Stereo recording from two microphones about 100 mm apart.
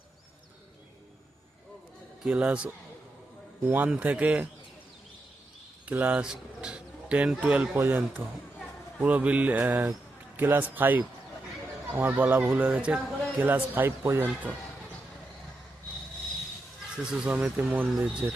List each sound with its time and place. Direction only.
2.2 s speech: 10° right (ahead or behind)
5.8 s a man's voice: 15° right (ahead or behind)
17.0 s speech: 10° right (ahead or behind)